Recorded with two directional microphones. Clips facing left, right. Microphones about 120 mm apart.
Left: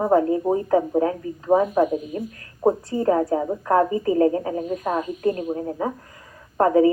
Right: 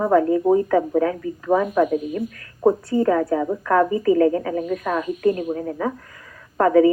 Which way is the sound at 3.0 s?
25° left (ahead or behind).